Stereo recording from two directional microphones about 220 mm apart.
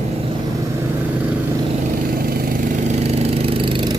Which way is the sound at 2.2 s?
45° right (ahead or behind).